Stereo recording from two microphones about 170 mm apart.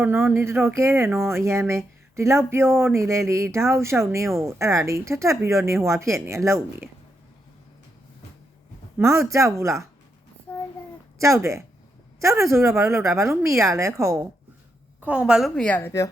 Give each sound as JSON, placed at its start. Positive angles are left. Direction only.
{"t": 0.0, "sound": "speech", "side_deg": -10}
{"t": 9.0, "sound": "speech", "side_deg": -15}
{"t": 11.2, "sound": "speech", "side_deg": -15}
{"t": 15.0, "sound": "a woman's voice", "side_deg": -5}